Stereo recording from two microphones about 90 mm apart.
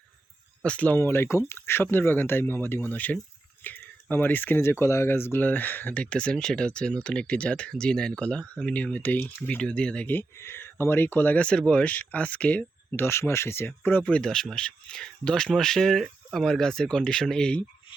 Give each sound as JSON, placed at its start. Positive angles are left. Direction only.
{"t": 0.6, "sound": "speech", "side_deg": 15}
{"t": 10.1, "sound": "speech", "side_deg": 25}
{"t": 13.8, "sound": "speech", "side_deg": 15}